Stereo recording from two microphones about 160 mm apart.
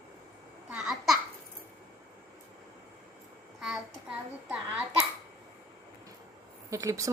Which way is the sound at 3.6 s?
5° right (ahead or behind).